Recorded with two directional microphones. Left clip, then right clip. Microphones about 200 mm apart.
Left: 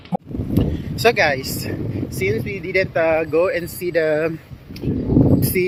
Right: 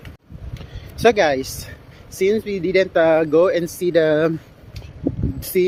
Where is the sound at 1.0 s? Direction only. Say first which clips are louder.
Right 1 dB; 10° right (ahead or behind).